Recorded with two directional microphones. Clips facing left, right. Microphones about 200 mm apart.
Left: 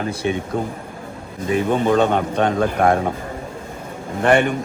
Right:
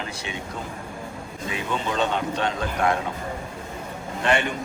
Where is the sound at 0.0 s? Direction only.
50° left (ahead or behind).